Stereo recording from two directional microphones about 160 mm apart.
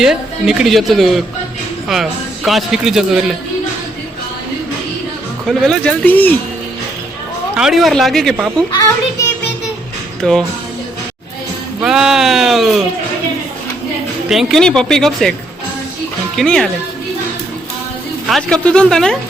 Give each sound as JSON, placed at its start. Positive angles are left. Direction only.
{"t": 0.0, "sound": "speech", "side_deg": -5}
{"t": 5.5, "sound": "speech", "side_deg": 0}
{"t": 7.5, "sound": "speech", "side_deg": -5}
{"t": 8.7, "sound": "a child's voice", "side_deg": 20}
{"t": 10.2, "sound": "speech", "side_deg": 5}
{"t": 11.8, "sound": "speech", "side_deg": -5}
{"t": 14.3, "sound": "speech", "side_deg": 0}
{"t": 16.4, "sound": "speech", "side_deg": 5}
{"t": 18.3, "sound": "speech", "side_deg": 0}